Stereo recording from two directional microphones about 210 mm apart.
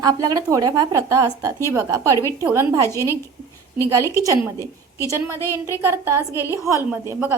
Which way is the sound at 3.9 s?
15° right (ahead or behind).